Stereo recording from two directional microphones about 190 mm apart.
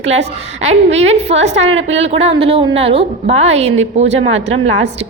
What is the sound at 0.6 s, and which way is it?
A woman's voice, 35° right (ahead or behind).